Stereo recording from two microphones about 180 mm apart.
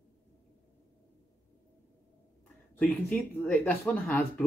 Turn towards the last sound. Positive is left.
turn(degrees=10)  # may be behind; listen again after turning